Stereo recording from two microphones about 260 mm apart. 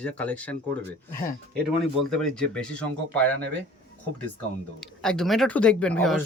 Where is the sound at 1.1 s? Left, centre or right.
Left.